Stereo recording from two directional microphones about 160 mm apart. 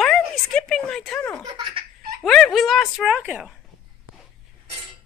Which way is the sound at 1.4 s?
25° right (ahead or behind).